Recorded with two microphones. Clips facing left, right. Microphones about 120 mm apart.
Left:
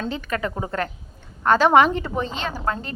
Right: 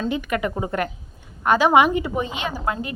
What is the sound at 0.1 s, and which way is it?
A woman's voice, 15° right (ahead or behind).